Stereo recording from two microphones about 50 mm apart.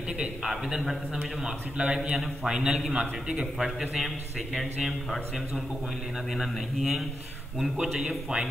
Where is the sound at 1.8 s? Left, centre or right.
Right.